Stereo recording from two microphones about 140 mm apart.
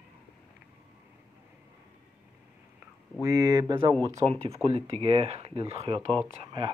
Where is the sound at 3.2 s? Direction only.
25° right (ahead or behind).